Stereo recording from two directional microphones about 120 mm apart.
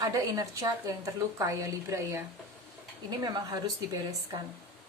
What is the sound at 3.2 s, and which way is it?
Speech, 30° right (ahead or behind).